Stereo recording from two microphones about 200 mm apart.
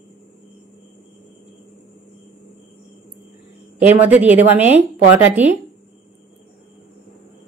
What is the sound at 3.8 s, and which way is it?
A woman's voice, 10° right (ahead or behind).